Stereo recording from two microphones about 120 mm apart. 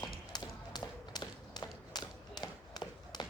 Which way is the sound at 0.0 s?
35° left (ahead or behind).